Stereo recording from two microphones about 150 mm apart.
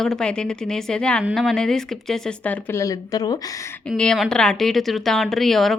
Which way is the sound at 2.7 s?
25° left (ahead or behind).